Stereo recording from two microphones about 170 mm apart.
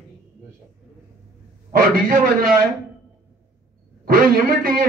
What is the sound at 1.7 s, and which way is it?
Speech, 60° right (ahead or behind).